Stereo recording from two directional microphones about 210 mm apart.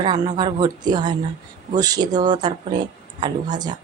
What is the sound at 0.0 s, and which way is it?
Speech, 20° right (ahead or behind).